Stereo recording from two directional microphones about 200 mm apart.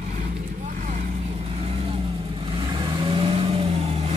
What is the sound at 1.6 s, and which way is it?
Vehicle, 30° right (ahead or behind).